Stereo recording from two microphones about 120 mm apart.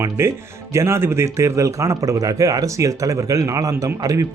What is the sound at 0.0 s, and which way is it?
Speech, 20° right (ahead or behind).